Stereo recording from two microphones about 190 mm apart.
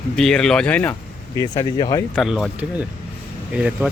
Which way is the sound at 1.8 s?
20° left (ahead or behind).